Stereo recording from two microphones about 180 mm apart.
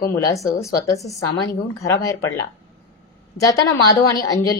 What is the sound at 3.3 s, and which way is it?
A woman's voice, 20° left (ahead or behind).